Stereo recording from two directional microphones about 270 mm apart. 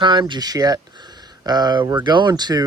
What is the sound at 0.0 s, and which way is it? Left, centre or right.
Speech, centre.